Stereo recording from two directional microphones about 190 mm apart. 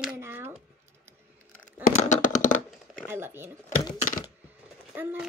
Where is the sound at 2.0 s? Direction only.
40° left (ahead or behind).